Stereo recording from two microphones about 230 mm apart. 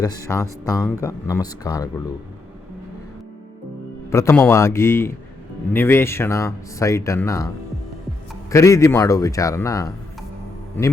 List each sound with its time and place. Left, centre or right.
0.0 s speech: centre
4.1 s speech: centre